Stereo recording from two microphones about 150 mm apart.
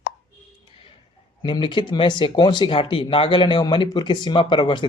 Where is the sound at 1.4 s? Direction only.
35° left (ahead or behind).